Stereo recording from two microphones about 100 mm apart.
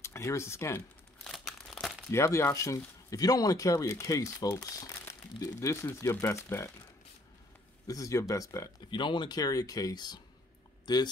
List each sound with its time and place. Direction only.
0.0 s speech: 30° left (ahead or behind)
1.2 s crumpling: centre (ahead or behind)
2.0 s speech: 30° left (ahead or behind)
7.8 s speech: 35° left (ahead or behind)
8.9 s speech: 50° left (ahead or behind)